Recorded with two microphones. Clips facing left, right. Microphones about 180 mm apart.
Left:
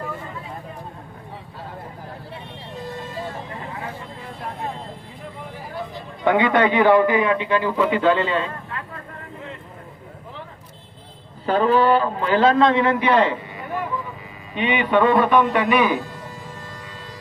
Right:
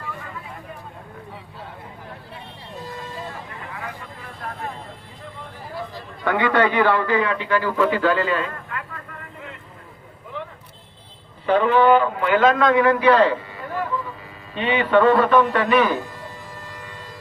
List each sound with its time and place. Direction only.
3.6 s vehicle: 25° left (ahead or behind)
6.2 s a man's voice: 20° left (ahead or behind)
11.4 s a man's voice: 35° left (ahead or behind); by 16.0 s 15° left (ahead or behind)